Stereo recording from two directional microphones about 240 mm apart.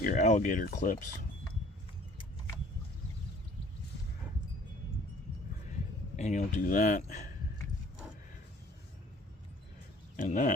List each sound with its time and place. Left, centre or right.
0.0 s speech: left
6.1 s speech: left
10.2 s speech: left